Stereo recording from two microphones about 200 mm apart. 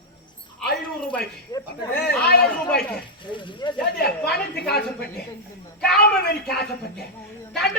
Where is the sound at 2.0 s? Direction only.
55° left (ahead or behind).